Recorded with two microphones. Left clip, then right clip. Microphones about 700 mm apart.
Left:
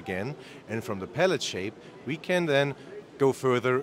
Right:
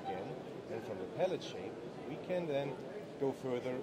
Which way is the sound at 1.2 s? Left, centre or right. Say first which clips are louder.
Left 12 dB; left.